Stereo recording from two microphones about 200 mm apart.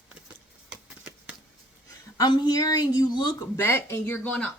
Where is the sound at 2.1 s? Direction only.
20° left (ahead or behind).